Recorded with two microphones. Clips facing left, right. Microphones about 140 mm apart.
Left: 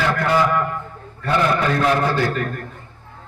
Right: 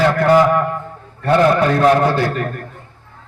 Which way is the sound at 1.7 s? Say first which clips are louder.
Right 5 dB; 35° right (ahead or behind).